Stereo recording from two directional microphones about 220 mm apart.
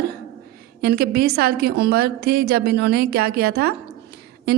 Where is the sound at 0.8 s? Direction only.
45° right (ahead or behind).